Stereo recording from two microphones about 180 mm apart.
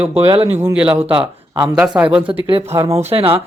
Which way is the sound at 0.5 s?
10° right (ahead or behind).